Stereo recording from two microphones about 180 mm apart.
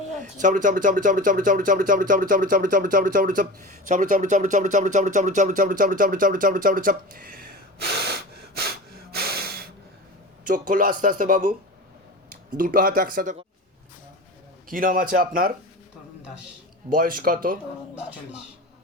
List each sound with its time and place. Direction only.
0.1 s speech: 45° right (ahead or behind)
12.5 s speech: 50° right (ahead or behind)
14.7 s speech: 50° right (ahead or behind)
16.9 s speech: 50° right (ahead or behind)